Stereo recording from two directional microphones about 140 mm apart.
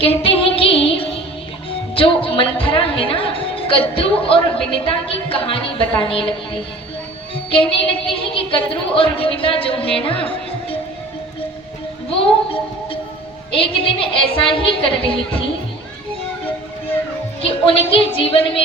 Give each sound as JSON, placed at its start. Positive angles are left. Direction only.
{"t": 0.0, "sound": "music", "side_deg": 40}
{"t": 2.0, "sound": "speech", "side_deg": 40}
{"t": 7.5, "sound": "speech", "side_deg": 40}
{"t": 10.1, "sound": "music", "side_deg": 40}
{"t": 13.5, "sound": "speech", "side_deg": 40}
{"t": 17.4, "sound": "speech", "side_deg": 40}